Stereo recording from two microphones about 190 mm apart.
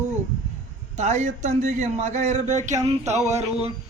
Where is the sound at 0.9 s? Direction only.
40° right (ahead or behind).